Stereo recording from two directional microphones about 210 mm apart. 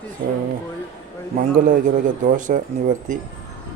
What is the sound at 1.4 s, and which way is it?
Speech, 40° right (ahead or behind).